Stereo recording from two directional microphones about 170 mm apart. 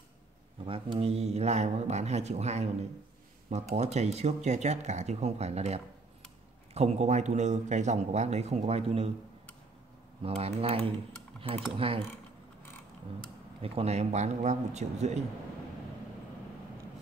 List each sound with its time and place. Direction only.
0.7 s speech: 35° right (ahead or behind)
10.2 s speech: 35° right (ahead or behind)
13.6 s speech: 35° right (ahead or behind)